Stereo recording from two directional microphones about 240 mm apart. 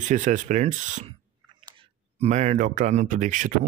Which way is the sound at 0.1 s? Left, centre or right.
Right.